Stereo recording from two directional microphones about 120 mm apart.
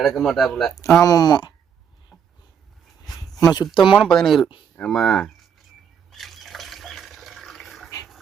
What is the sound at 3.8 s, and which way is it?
Speech, centre (ahead or behind).